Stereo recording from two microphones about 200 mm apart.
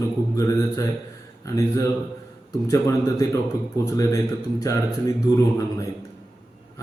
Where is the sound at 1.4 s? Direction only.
15° left (ahead or behind).